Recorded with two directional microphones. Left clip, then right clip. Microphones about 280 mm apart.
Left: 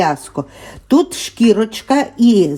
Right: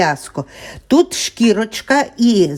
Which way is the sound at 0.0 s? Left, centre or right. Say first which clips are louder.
Even; right.